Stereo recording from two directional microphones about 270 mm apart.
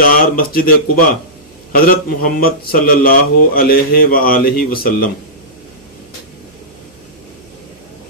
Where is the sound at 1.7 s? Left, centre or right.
Left.